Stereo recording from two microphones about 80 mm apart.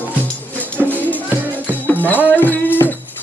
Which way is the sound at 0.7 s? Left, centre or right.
Left.